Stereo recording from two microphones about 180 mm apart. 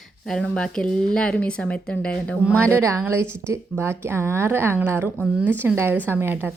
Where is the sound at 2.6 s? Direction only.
15° right (ahead or behind).